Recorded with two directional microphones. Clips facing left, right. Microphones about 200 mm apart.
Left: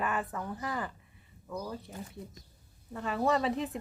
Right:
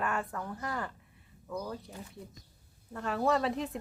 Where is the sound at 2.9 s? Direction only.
Centre (ahead or behind).